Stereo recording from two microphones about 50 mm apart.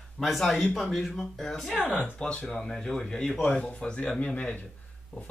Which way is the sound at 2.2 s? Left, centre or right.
Centre.